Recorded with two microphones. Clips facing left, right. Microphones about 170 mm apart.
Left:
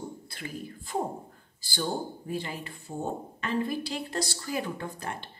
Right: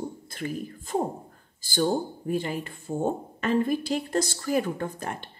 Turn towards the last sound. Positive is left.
turn(degrees=-45)  # may be behind; listen again after turning